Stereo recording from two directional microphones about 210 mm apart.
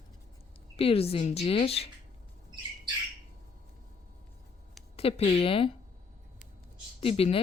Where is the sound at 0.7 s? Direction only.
30° left (ahead or behind).